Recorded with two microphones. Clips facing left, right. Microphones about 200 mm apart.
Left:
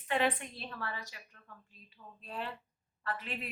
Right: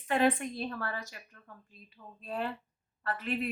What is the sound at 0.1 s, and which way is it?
A woman's voice, 45° right (ahead or behind).